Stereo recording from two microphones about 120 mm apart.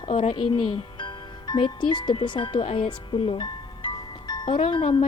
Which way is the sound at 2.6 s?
55° left (ahead or behind).